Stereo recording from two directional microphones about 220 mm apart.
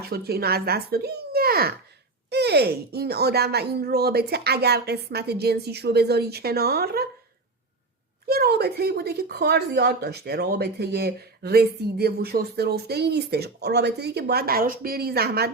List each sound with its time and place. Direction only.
0.1 s speech: 45° right (ahead or behind)
8.3 s speech: 45° right (ahead or behind)